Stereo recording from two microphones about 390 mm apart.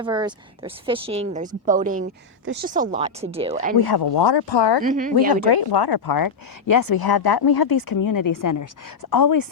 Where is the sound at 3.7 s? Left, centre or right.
Left.